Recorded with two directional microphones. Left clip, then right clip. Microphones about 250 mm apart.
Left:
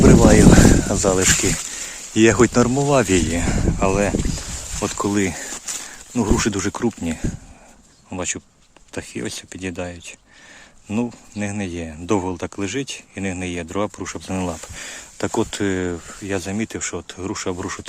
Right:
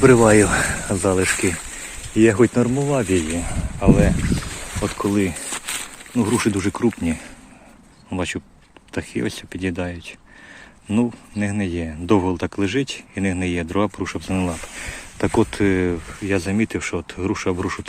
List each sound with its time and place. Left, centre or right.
0.0 s speech: centre
2.1 s speech: left